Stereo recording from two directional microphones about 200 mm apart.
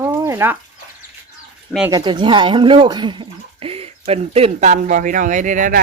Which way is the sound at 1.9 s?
20° right (ahead or behind).